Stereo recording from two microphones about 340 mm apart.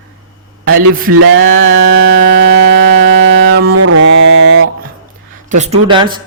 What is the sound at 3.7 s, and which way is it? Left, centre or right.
Mantra, right.